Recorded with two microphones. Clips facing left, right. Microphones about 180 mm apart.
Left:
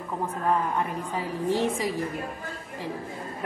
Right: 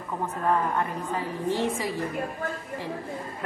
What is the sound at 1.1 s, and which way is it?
Speech, 15° left (ahead or behind).